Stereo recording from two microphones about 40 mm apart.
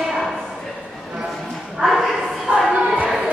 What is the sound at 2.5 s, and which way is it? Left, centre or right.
Choir, right.